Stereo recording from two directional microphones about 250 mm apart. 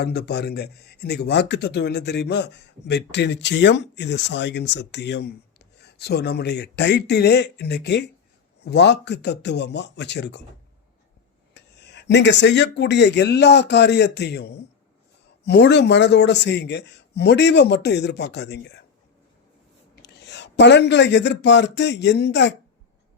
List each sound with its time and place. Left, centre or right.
0.0 s speech: left
11.5 s speech: left
20.0 s speech: left